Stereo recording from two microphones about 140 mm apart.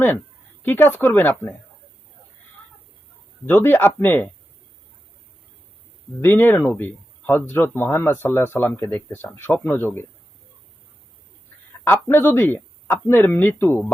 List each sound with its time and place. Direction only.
0.6 s speech: 15° left (ahead or behind)
3.4 s speech: 15° left (ahead or behind)
6.2 s speech: 15° left (ahead or behind)
11.9 s speech: 15° left (ahead or behind)